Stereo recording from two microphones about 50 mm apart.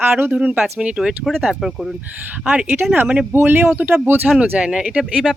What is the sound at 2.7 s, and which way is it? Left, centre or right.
Speech, right.